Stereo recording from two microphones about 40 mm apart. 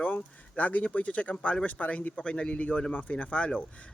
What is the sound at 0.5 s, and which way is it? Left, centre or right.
Speech, left.